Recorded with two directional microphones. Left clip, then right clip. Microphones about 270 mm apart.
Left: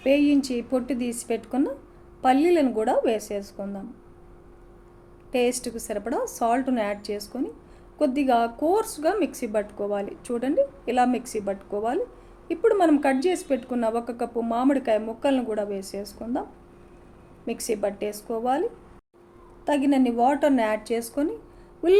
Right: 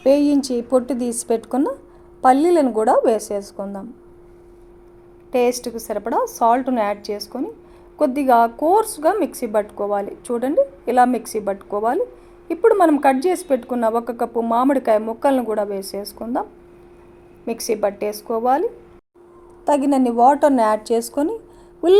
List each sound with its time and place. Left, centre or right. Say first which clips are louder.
0.0 s a woman's voice: right 5 dB; right
5.3 s a woman's voice: right 6 dB; centre
19.6 s a woman's voice: right 5 dB; centre